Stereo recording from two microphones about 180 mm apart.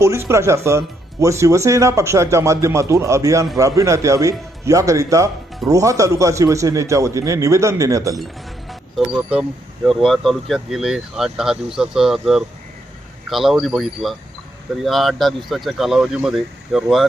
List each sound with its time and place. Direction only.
0.0 s speech: 15° right (ahead or behind)
8.7 s speech: 5° right (ahead or behind)